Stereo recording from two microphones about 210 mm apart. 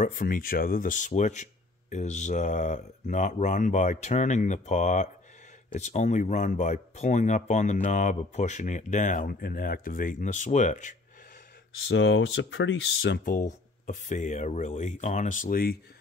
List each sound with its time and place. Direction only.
0.0 s speech: 40° left (ahead or behind)
11.9 s speech: 60° left (ahead or behind)
13.2 s speech: 40° left (ahead or behind)